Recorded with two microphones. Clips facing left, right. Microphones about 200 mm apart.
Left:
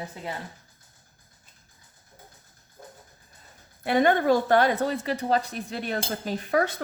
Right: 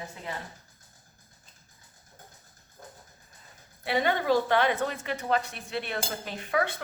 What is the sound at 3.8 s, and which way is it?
A woman's voice, 50° left (ahead or behind).